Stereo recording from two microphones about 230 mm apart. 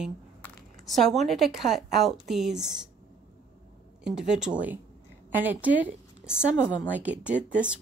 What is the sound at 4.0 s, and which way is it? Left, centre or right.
A woman's voice, centre.